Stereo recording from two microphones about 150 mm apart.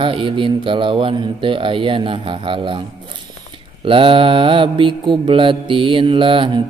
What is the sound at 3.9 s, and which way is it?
Mantra, 35° right (ahead or behind).